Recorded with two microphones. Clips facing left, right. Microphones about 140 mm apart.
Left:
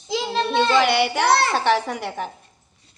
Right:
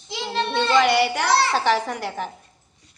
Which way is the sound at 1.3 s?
55° left (ahead or behind).